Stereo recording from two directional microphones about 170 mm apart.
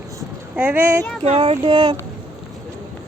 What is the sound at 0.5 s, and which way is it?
Speech, 10° right (ahead or behind).